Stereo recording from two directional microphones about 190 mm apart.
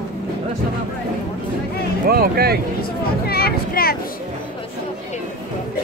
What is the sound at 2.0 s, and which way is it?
Speech, 55° right (ahead or behind).